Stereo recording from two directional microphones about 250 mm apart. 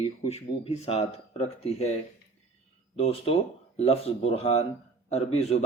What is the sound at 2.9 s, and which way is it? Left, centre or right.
Speech, left.